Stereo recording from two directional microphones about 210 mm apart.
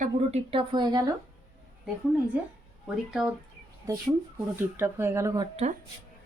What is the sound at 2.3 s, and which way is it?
Speech, 5° right (ahead or behind).